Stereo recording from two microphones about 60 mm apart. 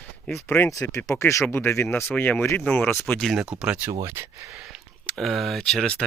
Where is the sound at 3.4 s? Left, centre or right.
Centre.